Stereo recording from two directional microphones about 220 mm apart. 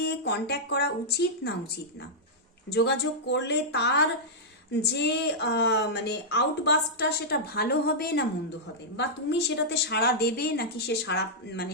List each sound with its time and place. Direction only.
0.0 s a woman's voice: 50° left (ahead or behind)
2.7 s a woman's voice: 50° left (ahead or behind)